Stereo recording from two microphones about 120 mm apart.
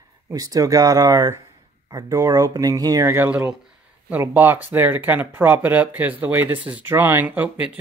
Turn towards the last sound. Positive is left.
turn(degrees=-10)  # may be behind; listen again after turning